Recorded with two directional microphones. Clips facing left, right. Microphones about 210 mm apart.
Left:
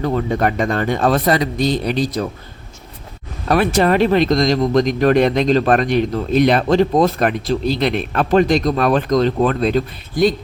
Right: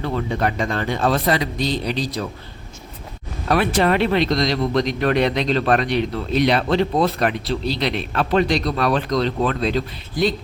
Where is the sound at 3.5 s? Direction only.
45° left (ahead or behind).